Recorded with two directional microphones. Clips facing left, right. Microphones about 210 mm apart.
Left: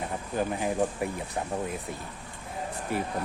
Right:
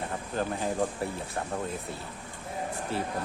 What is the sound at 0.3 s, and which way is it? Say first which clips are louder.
Speech: left 2 dB; 15° left (ahead or behind).